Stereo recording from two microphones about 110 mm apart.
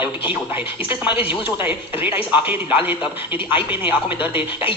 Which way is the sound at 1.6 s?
15° right (ahead or behind).